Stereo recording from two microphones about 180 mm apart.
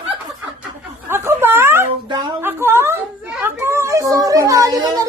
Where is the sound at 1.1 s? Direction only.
15° right (ahead or behind).